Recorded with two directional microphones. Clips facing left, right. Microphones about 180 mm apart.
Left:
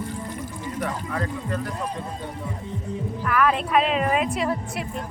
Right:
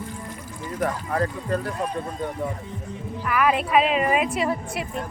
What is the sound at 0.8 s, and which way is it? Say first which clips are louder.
Speech: right 4 dB; 40° right (ahead or behind).